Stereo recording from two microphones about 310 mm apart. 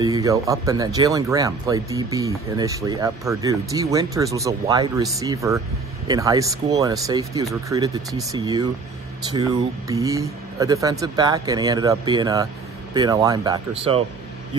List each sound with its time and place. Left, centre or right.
0.0 s speech: centre